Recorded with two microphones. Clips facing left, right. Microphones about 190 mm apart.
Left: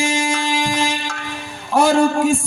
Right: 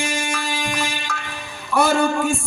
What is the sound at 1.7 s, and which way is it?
Music, 40° left (ahead or behind).